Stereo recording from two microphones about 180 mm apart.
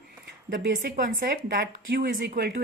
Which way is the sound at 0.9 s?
60° right (ahead or behind).